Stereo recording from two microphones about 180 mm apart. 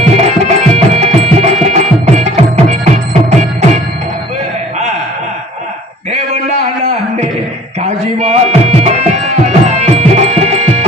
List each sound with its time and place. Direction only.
0.0 s music: 35° right (ahead or behind)
6.1 s a sound: 40° right (ahead or behind)
7.8 s music: 40° right (ahead or behind)